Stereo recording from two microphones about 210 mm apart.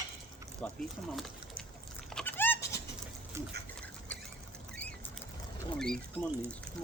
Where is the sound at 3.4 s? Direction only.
10° right (ahead or behind).